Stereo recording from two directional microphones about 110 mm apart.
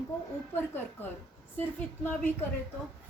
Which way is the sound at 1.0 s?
15° left (ahead or behind).